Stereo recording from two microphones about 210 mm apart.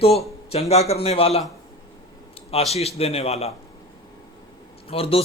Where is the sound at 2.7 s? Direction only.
30° left (ahead or behind).